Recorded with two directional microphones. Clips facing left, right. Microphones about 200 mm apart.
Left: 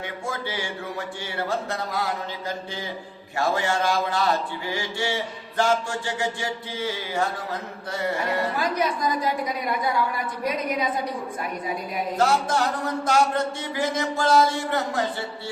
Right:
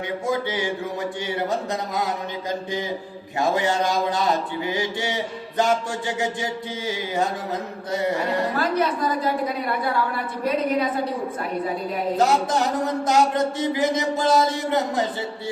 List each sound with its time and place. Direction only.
0.3 s speech: 20° right (ahead or behind)
8.5 s a woman's voice: 15° left (ahead or behind)
12.1 s speech: 15° right (ahead or behind)